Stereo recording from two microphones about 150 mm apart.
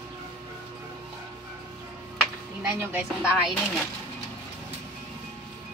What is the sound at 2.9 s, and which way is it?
Speech, 10° right (ahead or behind).